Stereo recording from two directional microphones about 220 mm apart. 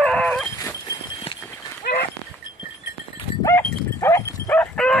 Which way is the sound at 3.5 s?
10° left (ahead or behind).